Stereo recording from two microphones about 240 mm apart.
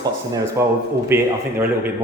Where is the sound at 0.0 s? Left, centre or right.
Centre.